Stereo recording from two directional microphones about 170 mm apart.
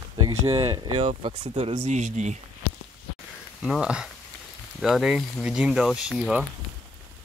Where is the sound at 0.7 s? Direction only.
25° right (ahead or behind).